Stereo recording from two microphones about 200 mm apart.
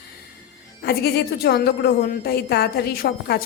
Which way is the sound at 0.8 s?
50° left (ahead or behind).